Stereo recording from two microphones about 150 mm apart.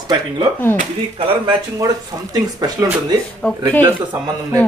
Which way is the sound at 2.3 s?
25° right (ahead or behind).